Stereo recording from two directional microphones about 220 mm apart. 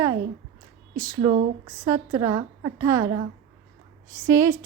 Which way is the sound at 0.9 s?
15° right (ahead or behind).